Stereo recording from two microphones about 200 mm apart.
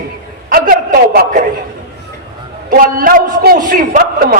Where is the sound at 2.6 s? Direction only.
45° right (ahead or behind).